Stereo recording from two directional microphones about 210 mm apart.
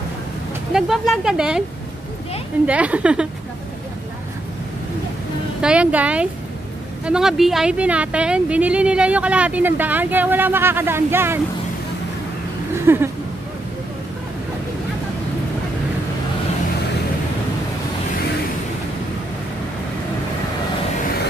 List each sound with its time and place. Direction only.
0.7 s speech: centre (ahead or behind)
2.6 s speech: 5° right (ahead or behind)
5.6 s speech: 5° right (ahead or behind)
12.7 s speech: 10° right (ahead or behind)